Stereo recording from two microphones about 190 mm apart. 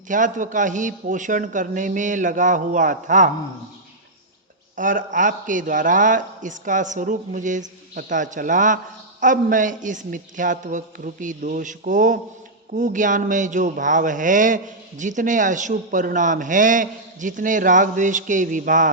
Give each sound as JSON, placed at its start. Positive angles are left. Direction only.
{"t": 0.1, "sound": "speech", "side_deg": -45}
{"t": 4.8, "sound": "speech", "side_deg": -45}